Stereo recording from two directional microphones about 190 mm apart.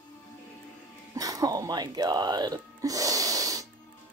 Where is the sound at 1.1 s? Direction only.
20° right (ahead or behind).